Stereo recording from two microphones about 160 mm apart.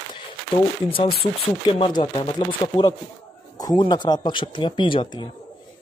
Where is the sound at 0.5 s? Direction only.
35° left (ahead or behind).